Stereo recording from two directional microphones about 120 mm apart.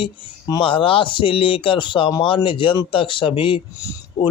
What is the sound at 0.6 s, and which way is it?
Speech, 45° left (ahead or behind).